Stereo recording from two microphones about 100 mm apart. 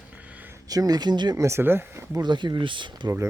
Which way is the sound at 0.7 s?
40° right (ahead or behind).